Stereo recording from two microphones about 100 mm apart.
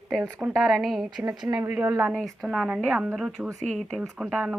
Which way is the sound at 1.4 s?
30° right (ahead or behind).